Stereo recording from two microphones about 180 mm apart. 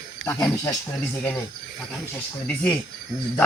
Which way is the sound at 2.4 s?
10° left (ahead or behind).